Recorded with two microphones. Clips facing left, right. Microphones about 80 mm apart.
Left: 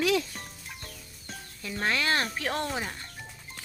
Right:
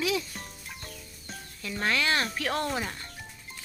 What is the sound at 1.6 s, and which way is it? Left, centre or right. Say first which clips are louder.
Speech: right 1 dB; left.